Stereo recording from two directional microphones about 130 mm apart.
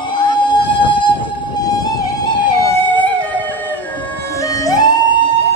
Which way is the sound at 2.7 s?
15° left (ahead or behind).